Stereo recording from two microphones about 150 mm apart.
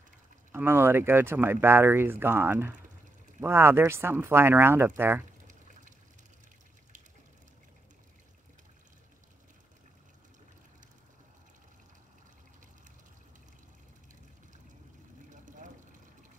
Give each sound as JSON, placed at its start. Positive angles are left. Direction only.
{"t": 0.5, "sound": "speech", "side_deg": -15}
{"t": 5.5, "sound": "water", "side_deg": -55}
{"t": 15.2, "sound": "a sound", "side_deg": -60}